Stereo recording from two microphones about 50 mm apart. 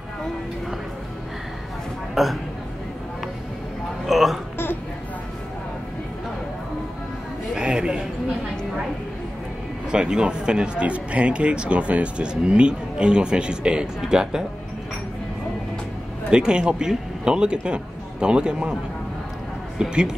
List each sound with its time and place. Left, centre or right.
2.2 s speech: centre
4.0 s speech: centre
7.5 s a sound: centre
9.8 s speech: centre
16.3 s speech: centre
19.8 s speech: centre